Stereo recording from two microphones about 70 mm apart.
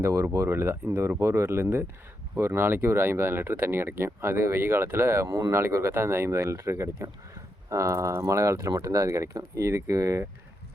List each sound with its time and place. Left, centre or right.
0.0 s speech: right
7.7 s speech: right